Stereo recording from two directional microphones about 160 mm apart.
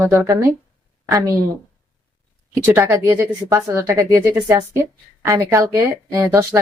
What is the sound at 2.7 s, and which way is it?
A woman's voice, 15° right (ahead or behind).